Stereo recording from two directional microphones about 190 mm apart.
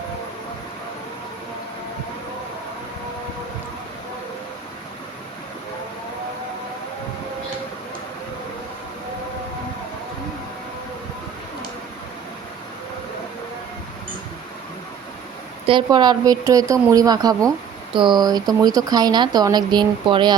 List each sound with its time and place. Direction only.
15.6 s speech: 25° right (ahead or behind)